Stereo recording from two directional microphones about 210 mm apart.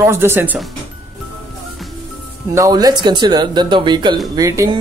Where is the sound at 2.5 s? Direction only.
15° right (ahead or behind).